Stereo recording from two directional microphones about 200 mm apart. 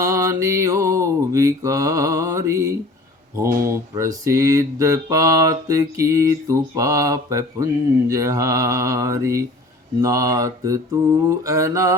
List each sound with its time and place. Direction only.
0.0 s mantra: 15° right (ahead or behind)